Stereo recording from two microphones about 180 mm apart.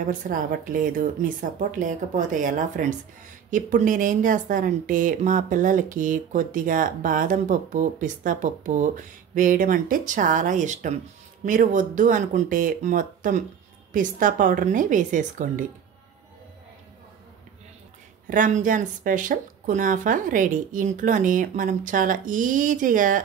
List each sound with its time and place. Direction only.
0.3 s speech: 50° right (ahead or behind)
18.2 s speech: 45° right (ahead or behind)